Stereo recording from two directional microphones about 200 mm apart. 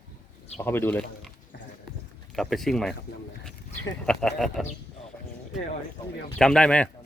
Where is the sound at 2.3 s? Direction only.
Centre (ahead or behind).